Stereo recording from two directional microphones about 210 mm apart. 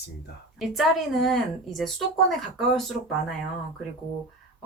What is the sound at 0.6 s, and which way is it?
A woman's voice, centre (ahead or behind).